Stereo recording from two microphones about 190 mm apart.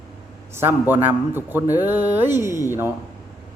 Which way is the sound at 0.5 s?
10° right (ahead or behind).